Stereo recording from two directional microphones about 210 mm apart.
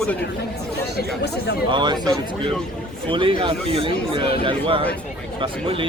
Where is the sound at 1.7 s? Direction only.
20° right (ahead or behind).